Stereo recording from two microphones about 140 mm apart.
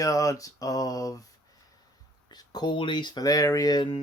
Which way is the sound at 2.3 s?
30° left (ahead or behind).